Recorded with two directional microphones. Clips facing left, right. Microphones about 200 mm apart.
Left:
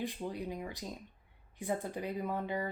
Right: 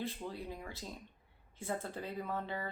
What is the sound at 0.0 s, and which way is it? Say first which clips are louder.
Speech: left 3 dB; 15° left (ahead or behind).